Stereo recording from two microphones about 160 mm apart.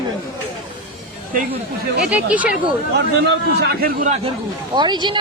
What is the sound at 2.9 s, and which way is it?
A man's voice, 90° right.